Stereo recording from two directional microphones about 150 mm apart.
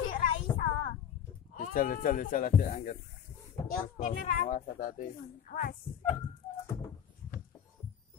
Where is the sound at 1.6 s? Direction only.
65° left (ahead or behind).